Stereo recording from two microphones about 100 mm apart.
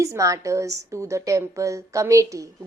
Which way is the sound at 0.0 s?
35° right (ahead or behind).